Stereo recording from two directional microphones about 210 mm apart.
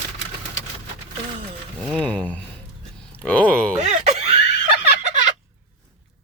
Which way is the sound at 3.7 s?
30° right (ahead or behind).